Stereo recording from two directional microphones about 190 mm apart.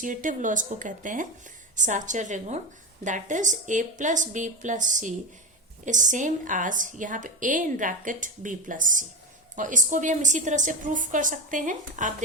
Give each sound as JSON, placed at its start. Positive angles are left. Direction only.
{"t": 0.0, "sound": "a woman's voice", "side_deg": -45}